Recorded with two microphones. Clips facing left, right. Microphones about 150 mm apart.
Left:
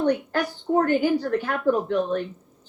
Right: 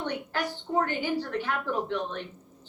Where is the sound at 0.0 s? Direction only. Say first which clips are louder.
Left 8 dB; 45° left (ahead or behind).